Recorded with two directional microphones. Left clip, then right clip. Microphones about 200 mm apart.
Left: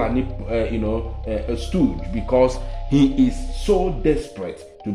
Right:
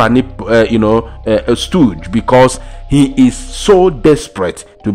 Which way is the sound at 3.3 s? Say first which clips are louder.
Right 11 dB; 45° right (ahead or behind).